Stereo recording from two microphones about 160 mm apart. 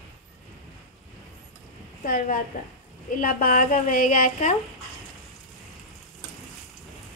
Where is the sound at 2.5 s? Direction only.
65° left (ahead or behind).